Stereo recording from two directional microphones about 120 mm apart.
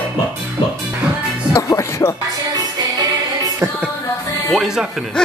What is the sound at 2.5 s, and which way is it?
Music, 35° right (ahead or behind).